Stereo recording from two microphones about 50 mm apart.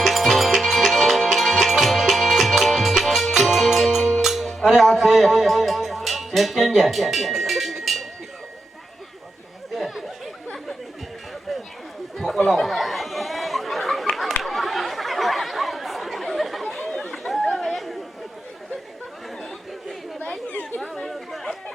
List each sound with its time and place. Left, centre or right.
0.0 s music: centre
9.7 s chatter: centre
12.1 s chatter: centre
16.7 s run: centre
17.2 s chatter: centre
17.5 s chatter: centre
17.7 s chatter: centre
20.5 s chatter: left
20.8 s chatter: centre